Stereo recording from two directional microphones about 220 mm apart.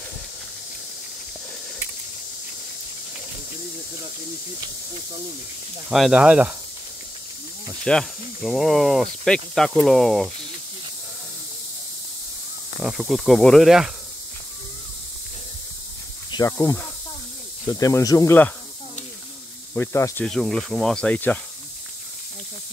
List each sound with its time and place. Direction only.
5.9 s speech: centre (ahead or behind)
7.8 s speech: centre (ahead or behind)
12.8 s speech: centre (ahead or behind)
16.3 s speech: 15° left (ahead or behind)
19.7 s speech: 10° left (ahead or behind)